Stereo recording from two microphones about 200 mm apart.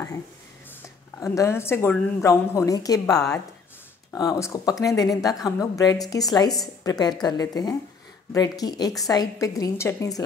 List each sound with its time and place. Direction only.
0.8 s speech: 15° left (ahead or behind)